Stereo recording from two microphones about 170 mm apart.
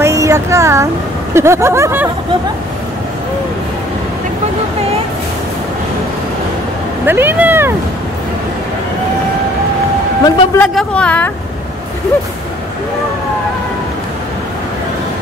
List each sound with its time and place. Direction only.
0.0 s a sound: 15° right (ahead or behind)
1.3 s speech: 15° right (ahead or behind)
7.1 s speech: 10° right (ahead or behind)
10.2 s a woman's voice: 15° left (ahead or behind)
10.7 s a woman's voice: 5° left (ahead or behind)